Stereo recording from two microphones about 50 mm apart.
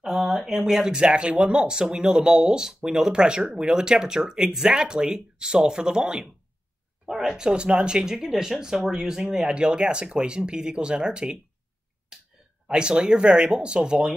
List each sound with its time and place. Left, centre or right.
0.0 s speech: centre
7.3 s speech: centre
12.1 s a sound: centre
12.6 s speech: centre